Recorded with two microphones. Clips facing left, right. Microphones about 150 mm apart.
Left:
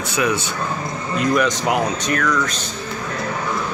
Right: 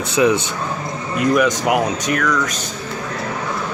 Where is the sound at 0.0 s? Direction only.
25° right (ahead or behind).